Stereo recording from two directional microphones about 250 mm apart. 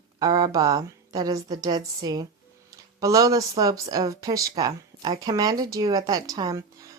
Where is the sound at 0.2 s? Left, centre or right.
Centre.